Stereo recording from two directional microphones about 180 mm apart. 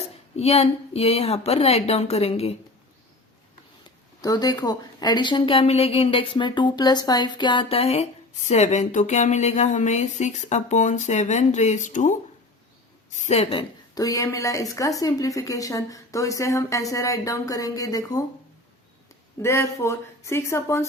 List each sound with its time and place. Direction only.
0.3 s a woman's voice: 35° left (ahead or behind)
4.2 s a woman's voice: 20° left (ahead or behind); by 12.1 s 45° left (ahead or behind)
13.1 s a woman's voice: 40° left (ahead or behind); by 18.2 s 20° left (ahead or behind)
19.4 s speech: 15° left (ahead or behind)